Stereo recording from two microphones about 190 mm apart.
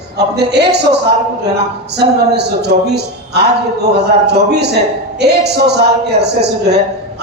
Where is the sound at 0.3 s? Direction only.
60° right (ahead or behind).